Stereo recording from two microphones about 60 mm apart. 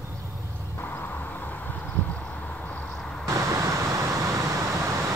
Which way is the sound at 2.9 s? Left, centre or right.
Centre.